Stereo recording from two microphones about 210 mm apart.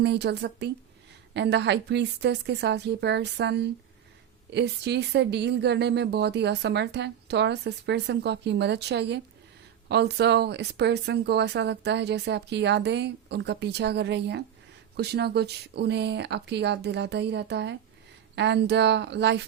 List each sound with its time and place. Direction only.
0.0 s a woman's voice: 55° right (ahead or behind)